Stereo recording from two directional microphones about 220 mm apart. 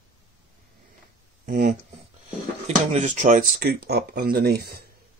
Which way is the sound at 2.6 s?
30° right (ahead or behind).